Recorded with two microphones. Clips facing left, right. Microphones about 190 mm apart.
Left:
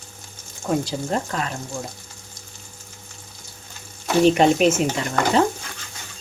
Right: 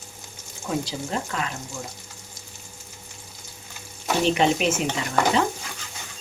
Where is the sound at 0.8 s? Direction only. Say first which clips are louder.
Left 4 dB; 40° left (ahead or behind).